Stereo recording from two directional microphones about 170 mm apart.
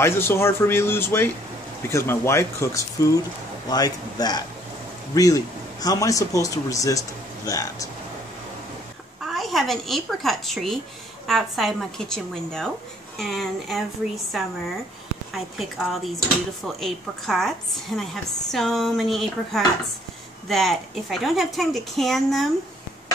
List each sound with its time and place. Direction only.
0.0 s speech: 15° left (ahead or behind)
9.2 s a woman's voice: centre (ahead or behind)